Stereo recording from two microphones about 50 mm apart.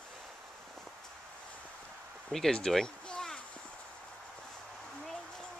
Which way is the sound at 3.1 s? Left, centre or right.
Centre.